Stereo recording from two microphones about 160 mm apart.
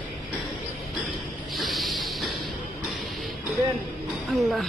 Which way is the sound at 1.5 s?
Centre (ahead or behind).